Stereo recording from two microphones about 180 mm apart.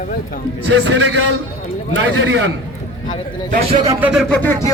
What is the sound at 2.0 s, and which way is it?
Speech, 90° right.